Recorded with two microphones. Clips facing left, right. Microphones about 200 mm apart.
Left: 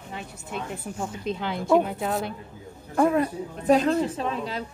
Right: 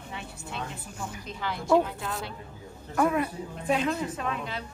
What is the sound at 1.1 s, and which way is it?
Speech, 25° left (ahead or behind).